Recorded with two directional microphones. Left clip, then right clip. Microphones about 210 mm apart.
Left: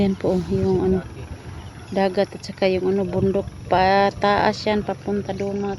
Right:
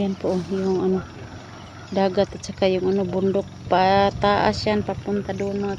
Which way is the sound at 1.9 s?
5° left (ahead or behind).